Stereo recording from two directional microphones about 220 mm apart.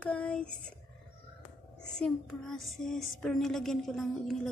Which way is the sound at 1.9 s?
Centre (ahead or behind).